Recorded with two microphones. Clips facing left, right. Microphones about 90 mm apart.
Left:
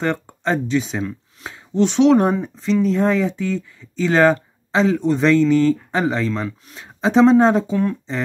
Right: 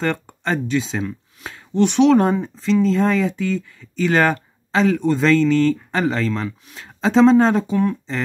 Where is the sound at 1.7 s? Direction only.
25° left (ahead or behind).